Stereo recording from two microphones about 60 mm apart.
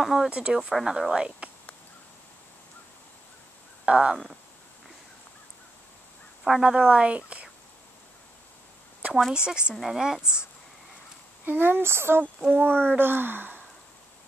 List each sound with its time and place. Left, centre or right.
0.0 s a woman's voice: centre
3.8 s speech: centre
6.4 s a woman's voice: centre
9.5 s a woman's voice: centre
11.4 s speech: right
12.4 s speech: right